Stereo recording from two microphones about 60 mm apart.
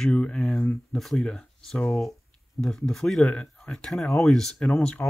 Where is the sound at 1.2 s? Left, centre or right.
Centre.